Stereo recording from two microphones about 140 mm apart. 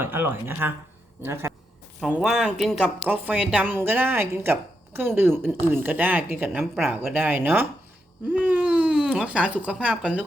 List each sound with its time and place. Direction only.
0.0 s speech: 15° right (ahead or behind)
2.0 s speech: 5° right (ahead or behind)